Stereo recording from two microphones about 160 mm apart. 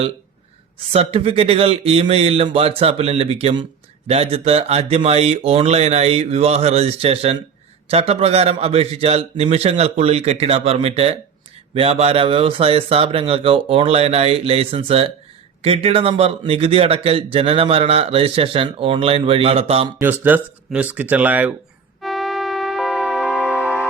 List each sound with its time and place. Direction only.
0.9 s speech: 40° right (ahead or behind)
20.0 s speech: 10° right (ahead or behind)
22.0 s music: centre (ahead or behind)
23.6 s music: 15° left (ahead or behind)